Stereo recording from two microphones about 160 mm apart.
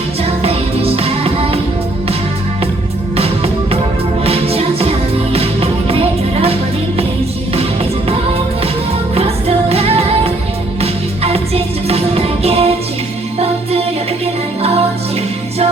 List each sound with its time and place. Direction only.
0.4 s music: 40° right (ahead or behind)
3.2 s music: 40° right (ahead or behind)
9.1 s music: 40° right (ahead or behind)